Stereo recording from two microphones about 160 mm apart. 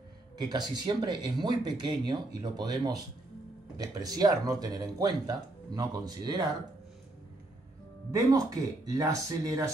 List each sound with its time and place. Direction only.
0.4 s speech: 25° right (ahead or behind)
8.1 s speech: 20° right (ahead or behind)